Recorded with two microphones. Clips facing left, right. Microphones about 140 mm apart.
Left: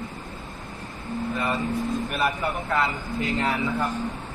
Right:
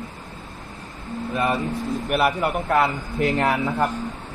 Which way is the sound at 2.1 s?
70° right (ahead or behind).